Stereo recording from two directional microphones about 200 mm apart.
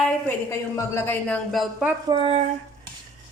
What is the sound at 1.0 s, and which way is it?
Speech, 10° left (ahead or behind).